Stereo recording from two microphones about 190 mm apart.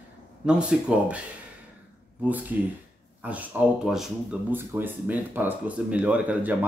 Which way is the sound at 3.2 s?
10° right (ahead or behind).